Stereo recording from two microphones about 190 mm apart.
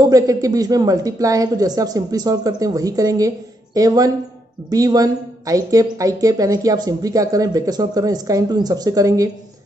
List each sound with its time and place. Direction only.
0.0 s a woman's voice: 20° right (ahead or behind)